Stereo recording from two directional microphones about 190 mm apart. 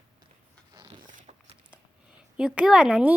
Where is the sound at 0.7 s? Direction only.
20° right (ahead or behind).